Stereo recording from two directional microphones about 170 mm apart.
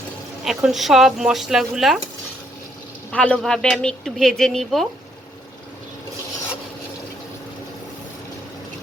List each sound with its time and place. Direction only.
0.4 s a woman's voice: centre (ahead or behind)
3.1 s a woman's voice: 5° left (ahead or behind)